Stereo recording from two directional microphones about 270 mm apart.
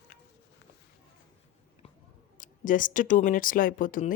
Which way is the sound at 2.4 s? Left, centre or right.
Left.